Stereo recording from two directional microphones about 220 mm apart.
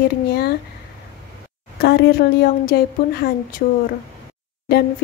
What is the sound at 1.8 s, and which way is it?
A woman's voice, 50° left (ahead or behind).